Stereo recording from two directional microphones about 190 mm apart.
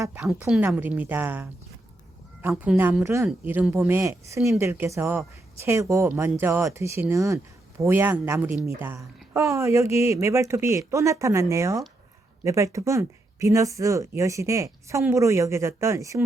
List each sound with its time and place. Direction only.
0.2 s speech: centre (ahead or behind)